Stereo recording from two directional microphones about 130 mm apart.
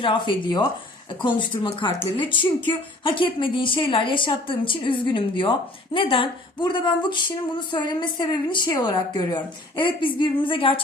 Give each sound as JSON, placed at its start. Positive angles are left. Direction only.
{"t": 0.0, "sound": "speech", "side_deg": 40}